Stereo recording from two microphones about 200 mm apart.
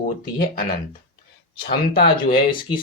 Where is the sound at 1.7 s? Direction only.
50° left (ahead or behind).